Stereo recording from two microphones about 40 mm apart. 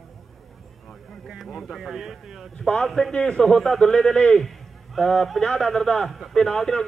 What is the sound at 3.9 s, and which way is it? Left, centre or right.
Speech, left.